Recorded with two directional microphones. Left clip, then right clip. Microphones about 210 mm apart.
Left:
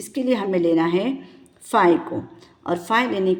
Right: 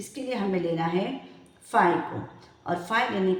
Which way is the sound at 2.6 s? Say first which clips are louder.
Left 5 dB; 40° left (ahead or behind).